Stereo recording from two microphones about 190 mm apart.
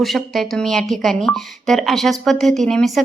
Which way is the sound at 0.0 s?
Centre (ahead or behind).